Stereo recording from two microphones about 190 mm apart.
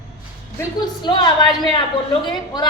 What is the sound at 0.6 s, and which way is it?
A woman's voice, 20° left (ahead or behind).